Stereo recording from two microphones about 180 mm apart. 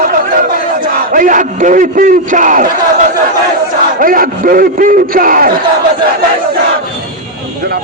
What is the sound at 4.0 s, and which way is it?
A man's voice, 50° right (ahead or behind).